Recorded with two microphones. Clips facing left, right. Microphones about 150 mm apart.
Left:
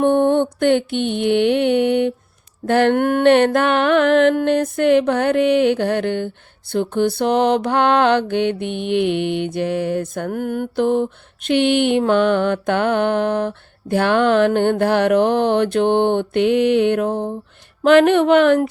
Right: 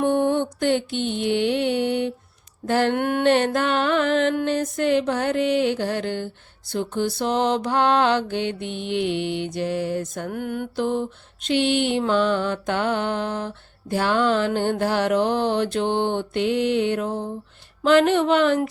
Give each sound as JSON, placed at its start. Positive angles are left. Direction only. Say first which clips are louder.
{"t": 0.0, "sound": "music", "louder": "left 5 dB", "side_deg": 60}